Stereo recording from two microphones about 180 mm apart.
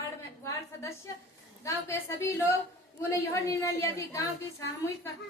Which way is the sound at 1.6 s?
15° left (ahead or behind).